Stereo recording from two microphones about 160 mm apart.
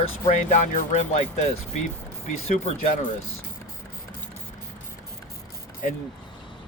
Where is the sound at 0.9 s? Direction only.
45° left (ahead or behind).